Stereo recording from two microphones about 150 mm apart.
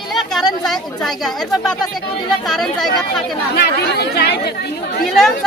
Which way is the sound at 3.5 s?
90° left.